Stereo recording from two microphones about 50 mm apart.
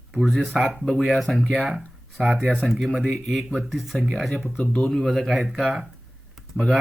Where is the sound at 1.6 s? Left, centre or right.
Centre.